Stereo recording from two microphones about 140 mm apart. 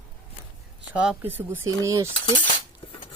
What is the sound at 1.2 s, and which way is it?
Speech, 15° right (ahead or behind).